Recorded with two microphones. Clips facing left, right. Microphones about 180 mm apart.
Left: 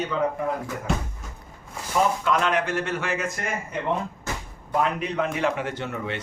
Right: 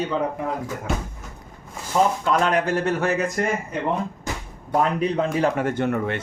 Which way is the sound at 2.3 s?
40° right (ahead or behind).